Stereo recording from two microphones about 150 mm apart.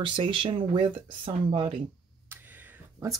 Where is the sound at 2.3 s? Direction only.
10° right (ahead or behind).